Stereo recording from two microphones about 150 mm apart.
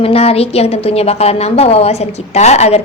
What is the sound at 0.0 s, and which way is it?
A woman's voice, 40° left (ahead or behind).